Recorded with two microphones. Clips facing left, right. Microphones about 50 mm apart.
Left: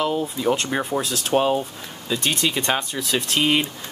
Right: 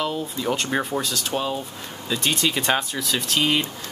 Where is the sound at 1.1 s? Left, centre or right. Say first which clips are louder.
Left 6 dB; left.